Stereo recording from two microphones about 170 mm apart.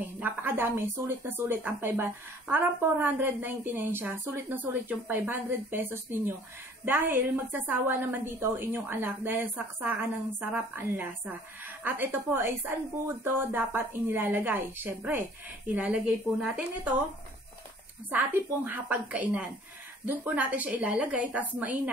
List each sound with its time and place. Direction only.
0.0 s a woman's voice: 10° right (ahead or behind)
18.1 s speech: 10° right (ahead or behind)